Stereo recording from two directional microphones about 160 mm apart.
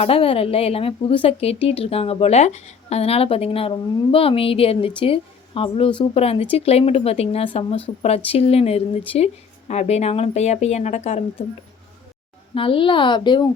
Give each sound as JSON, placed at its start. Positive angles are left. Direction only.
{"t": 0.0, "sound": "speech", "side_deg": 35}
{"t": 12.5, "sound": "a woman's voice", "side_deg": 35}